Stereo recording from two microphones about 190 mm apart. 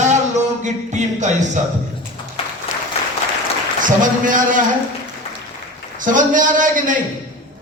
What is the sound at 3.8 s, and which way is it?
Speech, 45° right (ahead or behind).